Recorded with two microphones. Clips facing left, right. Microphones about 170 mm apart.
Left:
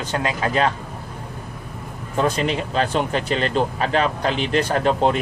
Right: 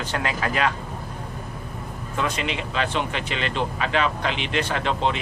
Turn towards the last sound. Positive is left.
turn(degrees=45)  # may be behind; listen again after turning